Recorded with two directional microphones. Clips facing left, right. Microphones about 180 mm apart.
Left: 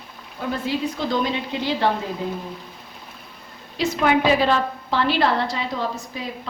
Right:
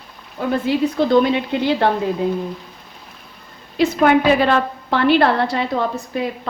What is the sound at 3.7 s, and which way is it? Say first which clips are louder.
A woman's voice: right 5 dB; 55° right (ahead or behind).